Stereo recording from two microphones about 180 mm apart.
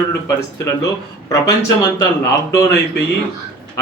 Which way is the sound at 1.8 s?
20° left (ahead or behind).